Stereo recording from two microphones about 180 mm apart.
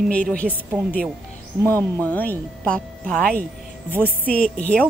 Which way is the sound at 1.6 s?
10° left (ahead or behind).